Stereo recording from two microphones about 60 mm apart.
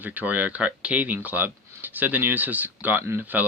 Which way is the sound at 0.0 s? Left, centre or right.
Right.